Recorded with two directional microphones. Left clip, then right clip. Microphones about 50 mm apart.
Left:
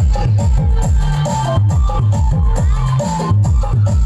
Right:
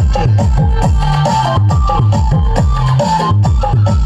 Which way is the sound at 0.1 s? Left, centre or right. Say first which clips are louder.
Right 8 dB; right.